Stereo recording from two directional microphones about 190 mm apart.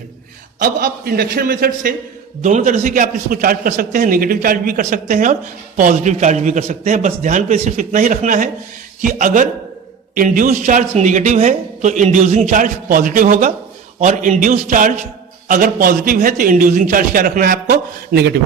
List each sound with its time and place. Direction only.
0.6 s a man's voice: 45° right (ahead or behind)